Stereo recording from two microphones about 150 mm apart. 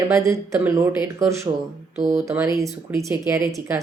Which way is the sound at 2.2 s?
20° right (ahead or behind).